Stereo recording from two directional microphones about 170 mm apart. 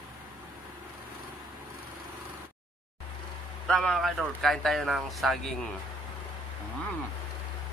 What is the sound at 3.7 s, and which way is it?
Speech, centre (ahead or behind).